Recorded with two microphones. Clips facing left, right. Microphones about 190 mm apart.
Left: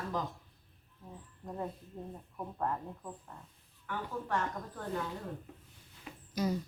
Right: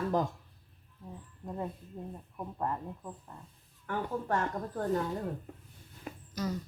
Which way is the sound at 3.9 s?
45° right (ahead or behind).